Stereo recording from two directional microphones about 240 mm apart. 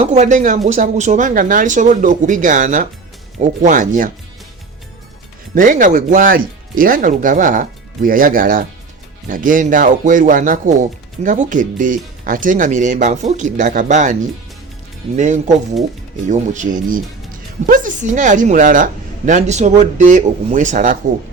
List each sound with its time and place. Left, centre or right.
0.0 s a woman's voice: right
5.5 s a woman's voice: right